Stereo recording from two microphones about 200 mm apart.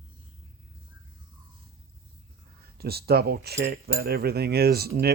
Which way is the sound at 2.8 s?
50° right (ahead or behind).